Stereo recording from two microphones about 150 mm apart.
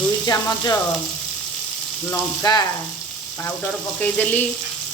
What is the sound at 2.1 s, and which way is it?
Frying, 25° left (ahead or behind).